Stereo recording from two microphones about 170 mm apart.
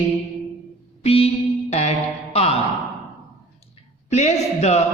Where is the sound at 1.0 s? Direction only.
35° left (ahead or behind).